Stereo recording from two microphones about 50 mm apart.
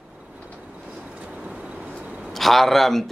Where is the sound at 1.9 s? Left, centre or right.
Right.